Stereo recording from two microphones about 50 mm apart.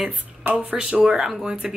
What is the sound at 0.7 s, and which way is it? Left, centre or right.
Speech, centre.